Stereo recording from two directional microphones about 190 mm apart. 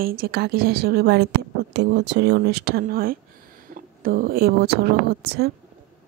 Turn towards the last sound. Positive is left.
turn(degrees=-55)  # may be behind; listen again after turning